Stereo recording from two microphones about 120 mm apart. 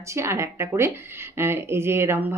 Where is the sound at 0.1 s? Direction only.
25° right (ahead or behind).